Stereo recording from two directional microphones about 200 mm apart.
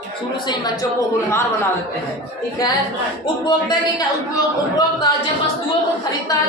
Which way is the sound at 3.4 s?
20° left (ahead or behind).